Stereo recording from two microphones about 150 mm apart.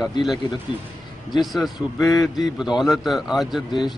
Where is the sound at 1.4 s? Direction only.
Centre (ahead or behind).